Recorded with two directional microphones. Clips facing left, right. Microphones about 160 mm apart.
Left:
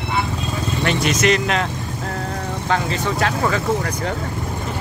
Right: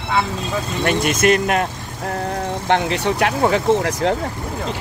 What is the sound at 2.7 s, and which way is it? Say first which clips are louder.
Speech: right 3 dB; 65° right (ahead or behind).